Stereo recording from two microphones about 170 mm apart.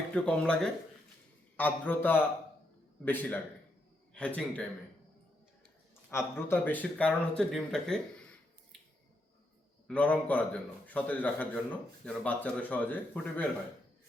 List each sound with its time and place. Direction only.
0.1 s a man's voice: 5° left (ahead or behind)
6.1 s a man's voice: 15° left (ahead or behind)
9.8 s a man's voice: 10° left (ahead or behind)